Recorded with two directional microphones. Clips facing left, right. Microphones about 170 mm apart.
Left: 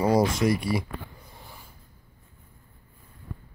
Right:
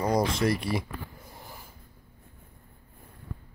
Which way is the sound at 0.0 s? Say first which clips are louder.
Left 4 dB; 5° left (ahead or behind).